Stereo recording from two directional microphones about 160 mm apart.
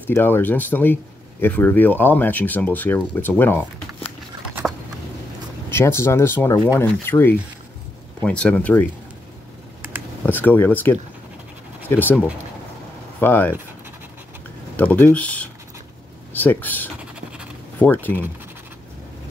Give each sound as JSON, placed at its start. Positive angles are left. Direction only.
{"t": 0.1, "sound": "speech", "side_deg": 15}
{"t": 5.7, "sound": "speech", "side_deg": 15}
{"t": 10.2, "sound": "speech", "side_deg": 10}
{"t": 13.2, "sound": "speech", "side_deg": 10}
{"t": 14.8, "sound": "speech", "side_deg": 10}